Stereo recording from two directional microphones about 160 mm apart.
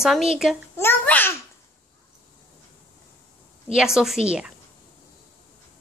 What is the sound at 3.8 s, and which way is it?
Speech, 5° right (ahead or behind).